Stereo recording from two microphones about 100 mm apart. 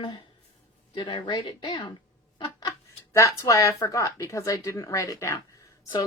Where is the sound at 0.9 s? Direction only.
45° left (ahead or behind).